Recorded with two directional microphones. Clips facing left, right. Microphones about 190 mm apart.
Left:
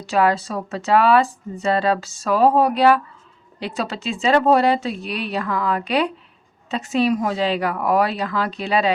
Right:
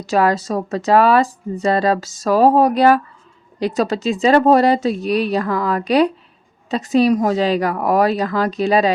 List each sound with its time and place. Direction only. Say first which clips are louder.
0.0 s speech: right 2 dB; 40° right (ahead or behind)